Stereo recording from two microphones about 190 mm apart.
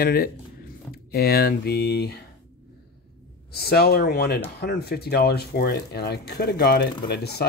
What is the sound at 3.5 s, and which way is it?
Speech, 55° left (ahead or behind).